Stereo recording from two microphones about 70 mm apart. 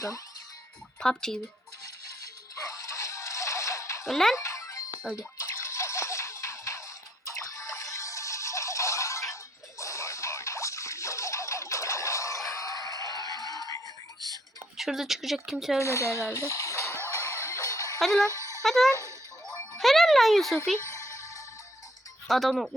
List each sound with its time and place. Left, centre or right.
0.9 s speech: centre
1.8 s music: left
4.0 s speech: centre
4.4 s music: left
5.1 s speech: left
5.6 s music: left
14.8 s speech: centre
15.8 s speech: left
16.5 s a sound: left
17.2 s music: left
18.0 s speech: centre
19.5 s jingle: centre
20.9 s music: left
22.3 s speech: centre